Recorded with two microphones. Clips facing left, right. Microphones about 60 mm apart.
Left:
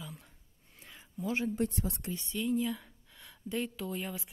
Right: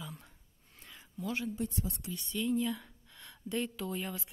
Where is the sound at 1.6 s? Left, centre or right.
Left.